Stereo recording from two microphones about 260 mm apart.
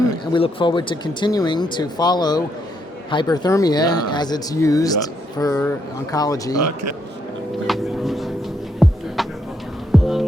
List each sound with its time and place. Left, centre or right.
0.3 s speech: centre
6.6 s speech: right
7.7 s a sound: centre
8.8 s music: centre
9.2 s a sound: centre
9.9 s music: centre